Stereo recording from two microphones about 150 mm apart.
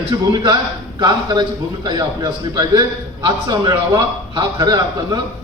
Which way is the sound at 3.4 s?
20° right (ahead or behind).